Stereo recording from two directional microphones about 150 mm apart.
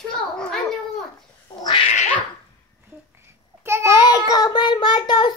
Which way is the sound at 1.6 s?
35° left (ahead or behind).